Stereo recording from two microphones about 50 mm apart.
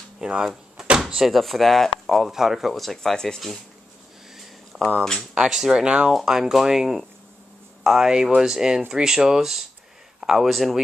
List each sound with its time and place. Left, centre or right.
0.2 s speech: centre
2.0 s speech: centre
4.7 s a sound: centre
5.3 s speech: centre
6.1 s speech: centre